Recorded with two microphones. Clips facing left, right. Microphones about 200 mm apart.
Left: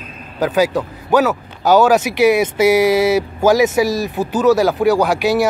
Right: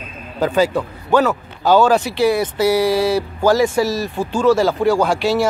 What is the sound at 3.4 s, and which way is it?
Speech, 10° left (ahead or behind).